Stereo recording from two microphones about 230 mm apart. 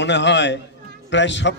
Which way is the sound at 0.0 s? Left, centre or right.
Left.